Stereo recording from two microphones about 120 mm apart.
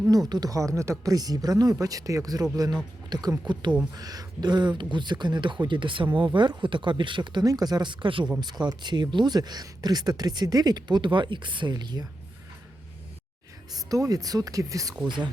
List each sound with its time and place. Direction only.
0.1 s speech: 35° right (ahead or behind)
13.7 s speech: 30° right (ahead or behind)
15.0 s speech: 40° right (ahead or behind)